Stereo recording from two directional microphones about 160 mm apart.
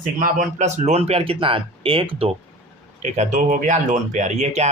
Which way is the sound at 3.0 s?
50° right (ahead or behind).